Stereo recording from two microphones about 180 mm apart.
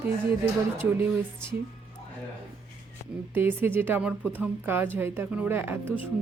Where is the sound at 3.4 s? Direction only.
10° right (ahead or behind).